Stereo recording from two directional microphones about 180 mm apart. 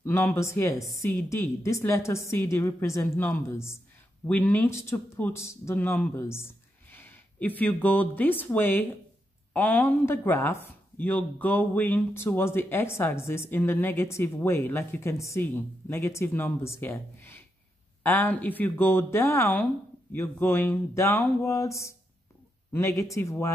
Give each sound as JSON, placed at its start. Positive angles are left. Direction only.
{"t": 0.0, "sound": "speech", "side_deg": 15}